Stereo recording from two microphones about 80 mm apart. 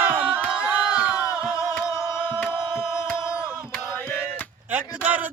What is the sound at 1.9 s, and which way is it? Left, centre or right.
Music, left.